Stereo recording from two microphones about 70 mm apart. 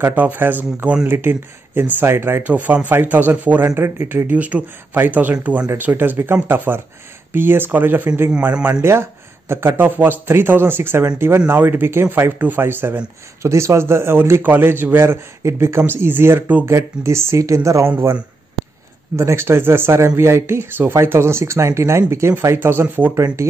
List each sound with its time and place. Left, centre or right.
0.0 s speech: right
2.4 s speech: right
17.8 s speech: right
19.1 s speech: right
23.1 s speech: right